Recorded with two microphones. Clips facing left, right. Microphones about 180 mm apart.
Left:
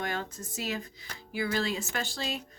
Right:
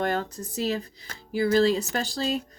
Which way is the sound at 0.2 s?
35° right (ahead or behind).